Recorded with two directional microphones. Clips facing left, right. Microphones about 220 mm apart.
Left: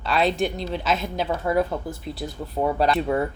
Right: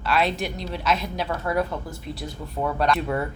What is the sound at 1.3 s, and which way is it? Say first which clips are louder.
Speech: left 3 dB; 20° left (ahead or behind).